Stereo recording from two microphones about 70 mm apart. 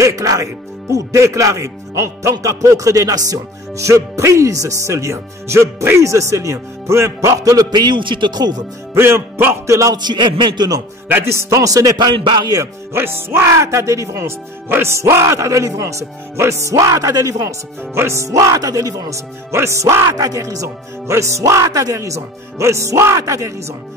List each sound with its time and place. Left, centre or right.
0.0 s speech: right
8.9 s music: right
9.9 s a man's voice: right
11.1 s music: right
11.6 s a man's voice: right
12.9 s speech: right
14.2 s a man's voice: right
17.9 s speech: right